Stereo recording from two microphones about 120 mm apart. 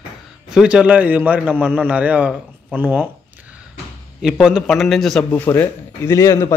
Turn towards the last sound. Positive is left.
turn(degrees=25)  # may be behind; listen again after turning